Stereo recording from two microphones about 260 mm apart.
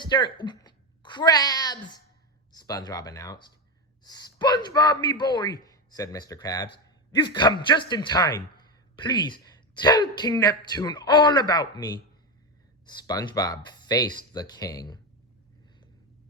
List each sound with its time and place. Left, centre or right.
0.0 s a woman's voice: centre